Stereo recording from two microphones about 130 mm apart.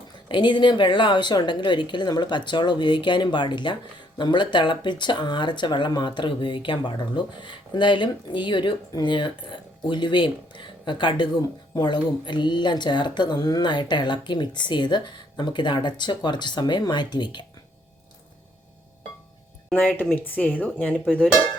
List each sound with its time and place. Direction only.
0.3 s speech: 40° left (ahead or behind)
19.9 s speech: 15° left (ahead or behind)